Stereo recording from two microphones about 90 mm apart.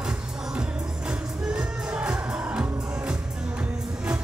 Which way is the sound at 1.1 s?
10° right (ahead or behind).